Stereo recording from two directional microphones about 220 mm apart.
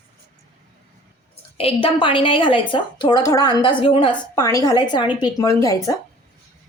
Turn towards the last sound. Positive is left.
turn(degrees=15)  # may be behind; listen again after turning